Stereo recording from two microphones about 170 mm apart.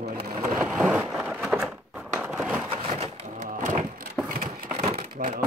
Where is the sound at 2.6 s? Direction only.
35° right (ahead or behind).